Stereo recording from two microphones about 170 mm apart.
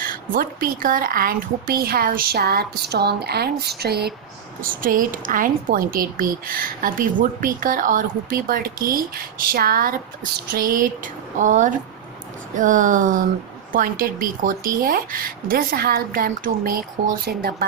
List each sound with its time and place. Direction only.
0.0 s a woman's voice: 55° right (ahead or behind)
4.6 s a woman's voice: 55° right (ahead or behind)